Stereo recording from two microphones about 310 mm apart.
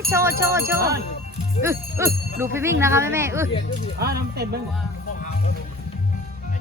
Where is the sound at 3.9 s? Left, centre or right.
Right.